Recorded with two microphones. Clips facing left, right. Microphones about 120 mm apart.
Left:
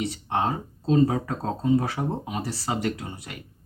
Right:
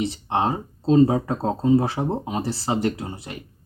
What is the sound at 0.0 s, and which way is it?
Speech, 30° right (ahead or behind).